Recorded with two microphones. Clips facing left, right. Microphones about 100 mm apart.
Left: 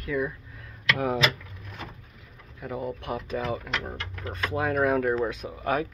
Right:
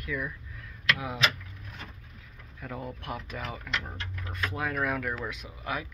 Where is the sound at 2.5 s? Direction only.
20° left (ahead or behind).